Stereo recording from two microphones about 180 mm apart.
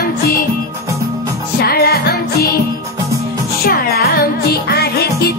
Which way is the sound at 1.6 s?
60° left (ahead or behind).